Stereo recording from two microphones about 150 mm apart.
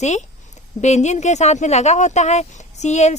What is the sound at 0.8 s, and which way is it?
Speech, 50° left (ahead or behind).